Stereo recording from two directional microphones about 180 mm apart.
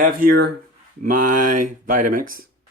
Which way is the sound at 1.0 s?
45° right (ahead or behind).